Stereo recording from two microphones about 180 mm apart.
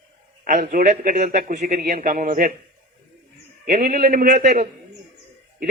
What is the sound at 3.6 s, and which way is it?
A man's voice, 50° right (ahead or behind).